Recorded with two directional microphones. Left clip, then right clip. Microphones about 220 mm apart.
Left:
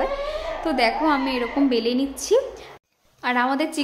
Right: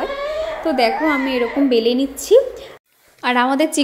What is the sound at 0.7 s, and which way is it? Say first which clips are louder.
A woman's voice: right 3 dB; 15° right (ahead or behind).